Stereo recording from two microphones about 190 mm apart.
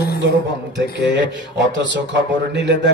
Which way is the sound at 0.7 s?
65° right (ahead or behind).